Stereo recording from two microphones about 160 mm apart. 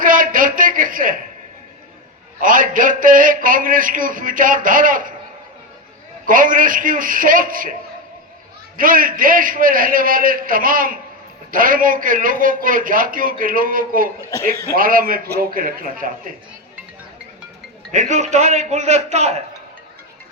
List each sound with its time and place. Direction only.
0.0 s a sound: 60° right (ahead or behind)
2.4 s a man's voice: 55° right (ahead or behind)
6.2 s a man's voice: 60° right (ahead or behind)
8.8 s a man's voice: 60° right (ahead or behind)
17.9 s a man's voice: 50° right (ahead or behind)